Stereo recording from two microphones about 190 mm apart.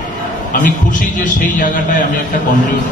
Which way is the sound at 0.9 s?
45° left (ahead or behind).